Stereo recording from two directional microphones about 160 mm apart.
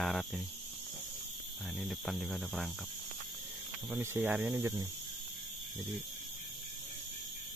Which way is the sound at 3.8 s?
10° right (ahead or behind).